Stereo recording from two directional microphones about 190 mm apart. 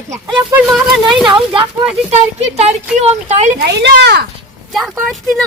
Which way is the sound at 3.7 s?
60° right (ahead or behind).